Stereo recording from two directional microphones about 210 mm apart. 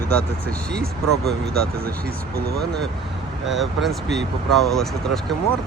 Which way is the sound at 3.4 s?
Centre (ahead or behind).